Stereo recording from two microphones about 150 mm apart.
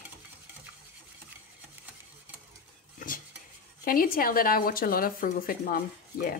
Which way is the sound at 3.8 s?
75° left (ahead or behind).